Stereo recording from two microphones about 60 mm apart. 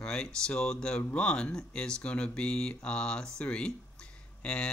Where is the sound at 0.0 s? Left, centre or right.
Centre.